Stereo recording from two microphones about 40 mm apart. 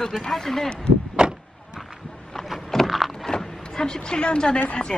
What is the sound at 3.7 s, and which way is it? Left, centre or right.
A woman's voice, centre.